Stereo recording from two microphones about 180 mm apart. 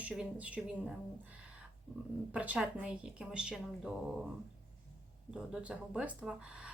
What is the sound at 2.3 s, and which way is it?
Speech, 5° right (ahead or behind).